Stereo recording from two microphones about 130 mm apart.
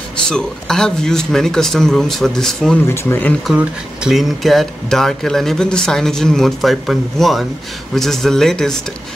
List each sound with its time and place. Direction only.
0.3 s speech: 5° left (ahead or behind)
2.9 s speech: 20° left (ahead or behind)
3.5 s speech: 5° right (ahead or behind)